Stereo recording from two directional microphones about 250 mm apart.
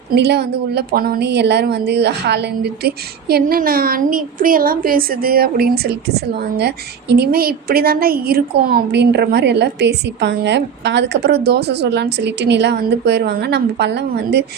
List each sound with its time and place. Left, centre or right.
0.1 s a woman's voice: right